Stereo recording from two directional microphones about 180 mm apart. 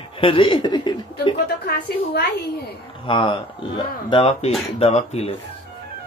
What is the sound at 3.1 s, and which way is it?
Speech, 30° left (ahead or behind).